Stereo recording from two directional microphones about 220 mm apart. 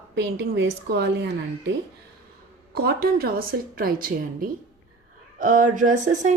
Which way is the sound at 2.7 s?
45° right (ahead or behind).